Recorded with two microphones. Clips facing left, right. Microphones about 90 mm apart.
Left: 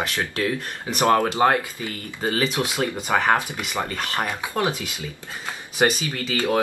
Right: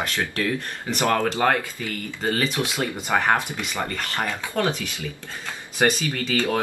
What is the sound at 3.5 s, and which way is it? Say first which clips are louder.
Speech: left 1 dB; 15° left (ahead or behind).